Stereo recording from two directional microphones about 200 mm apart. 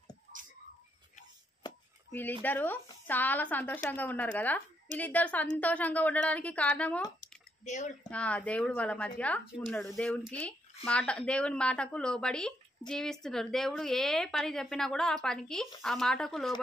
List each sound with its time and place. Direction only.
2.4 s speech: 10° left (ahead or behind)
7.2 s drip: 35° left (ahead or behind)
8.1 s speech: 5° left (ahead or behind)